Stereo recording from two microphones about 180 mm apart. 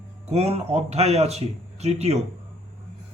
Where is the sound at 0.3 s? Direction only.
35° right (ahead or behind).